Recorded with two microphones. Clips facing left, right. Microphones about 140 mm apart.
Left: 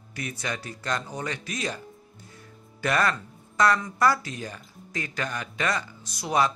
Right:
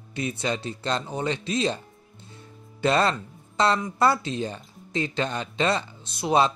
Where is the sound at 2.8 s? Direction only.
25° right (ahead or behind).